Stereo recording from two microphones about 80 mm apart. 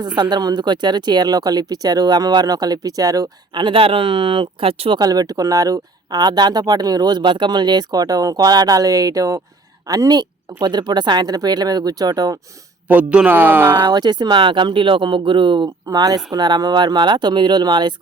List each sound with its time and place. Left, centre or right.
0.2 s speech: right
3.5 s speech: right
4.9 s speech: right
12.9 s speech: centre
13.8 s speech: right
15.9 s speech: right